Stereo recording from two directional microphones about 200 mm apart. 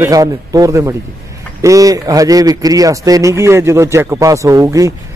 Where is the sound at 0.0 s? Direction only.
15° right (ahead or behind).